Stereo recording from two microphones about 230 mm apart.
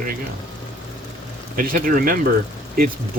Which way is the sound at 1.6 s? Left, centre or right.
Right.